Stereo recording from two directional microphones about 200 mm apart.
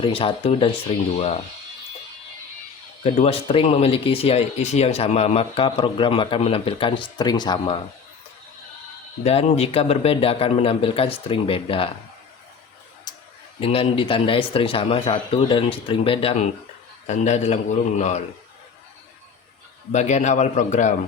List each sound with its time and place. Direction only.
0.0 s speech: 25° left (ahead or behind)
3.0 s speech: 30° left (ahead or behind)
9.2 s speech: 30° left (ahead or behind)
13.6 s a man's voice: 30° left (ahead or behind)
19.9 s a man's voice: 35° left (ahead or behind)